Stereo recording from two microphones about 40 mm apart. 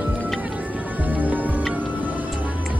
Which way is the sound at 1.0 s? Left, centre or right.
Right.